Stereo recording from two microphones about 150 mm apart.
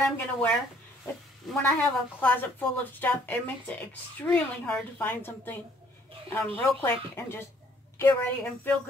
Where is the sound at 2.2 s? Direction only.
10° left (ahead or behind).